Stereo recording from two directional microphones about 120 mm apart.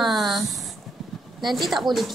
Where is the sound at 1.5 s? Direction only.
Centre (ahead or behind).